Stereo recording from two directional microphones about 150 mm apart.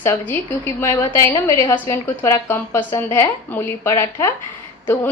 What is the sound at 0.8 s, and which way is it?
A woman's voice, 20° left (ahead or behind).